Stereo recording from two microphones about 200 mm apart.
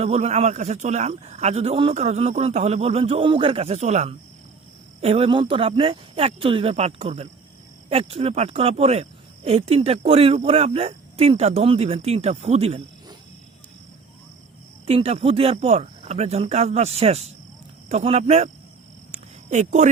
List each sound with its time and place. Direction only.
0.0 s speech: 30° right (ahead or behind)
14.8 s speech: 30° right (ahead or behind)
19.1 s a sound: 35° right (ahead or behind)